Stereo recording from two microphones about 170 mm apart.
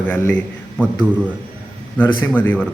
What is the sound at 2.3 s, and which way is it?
Speech, 10° left (ahead or behind).